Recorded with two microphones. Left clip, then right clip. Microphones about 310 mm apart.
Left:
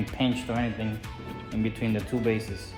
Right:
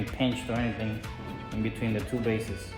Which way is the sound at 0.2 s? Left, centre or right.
Centre.